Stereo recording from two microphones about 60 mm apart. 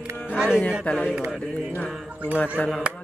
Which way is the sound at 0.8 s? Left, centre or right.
Centre.